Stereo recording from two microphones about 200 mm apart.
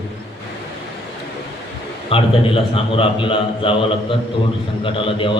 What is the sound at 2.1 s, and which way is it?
A man's voice, 30° left (ahead or behind).